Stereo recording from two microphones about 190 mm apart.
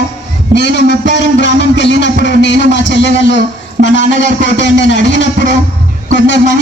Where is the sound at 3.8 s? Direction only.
70° left (ahead or behind).